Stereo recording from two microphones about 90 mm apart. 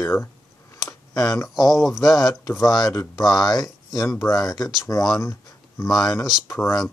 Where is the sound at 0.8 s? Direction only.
40° left (ahead or behind).